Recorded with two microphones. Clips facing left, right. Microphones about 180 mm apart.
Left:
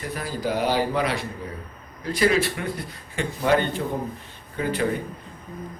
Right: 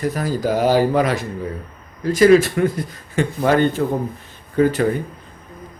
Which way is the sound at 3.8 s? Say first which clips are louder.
Right 8 dB; 80° right.